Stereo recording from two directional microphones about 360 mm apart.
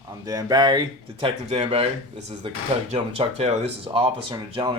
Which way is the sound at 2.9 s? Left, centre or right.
Centre.